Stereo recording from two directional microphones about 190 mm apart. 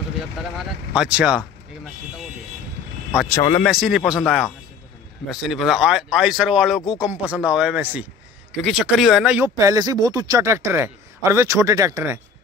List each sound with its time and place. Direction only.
0.4 s speech: 5° right (ahead or behind)
3.6 s speech: centre (ahead or behind)
9.6 s a man's voice: 20° right (ahead or behind)